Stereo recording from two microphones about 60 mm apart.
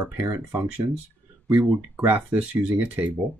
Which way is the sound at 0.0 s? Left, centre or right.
Right.